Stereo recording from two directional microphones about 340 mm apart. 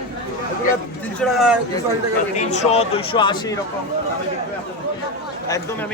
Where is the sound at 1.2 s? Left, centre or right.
Centre.